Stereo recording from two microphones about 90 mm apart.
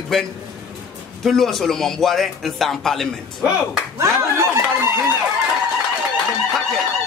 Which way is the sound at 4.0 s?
35° right (ahead or behind).